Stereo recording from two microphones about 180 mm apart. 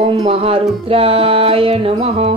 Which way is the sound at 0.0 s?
35° right (ahead or behind).